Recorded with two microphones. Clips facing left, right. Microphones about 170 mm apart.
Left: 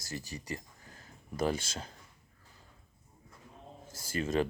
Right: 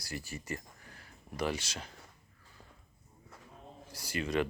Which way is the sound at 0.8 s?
40° left (ahead or behind).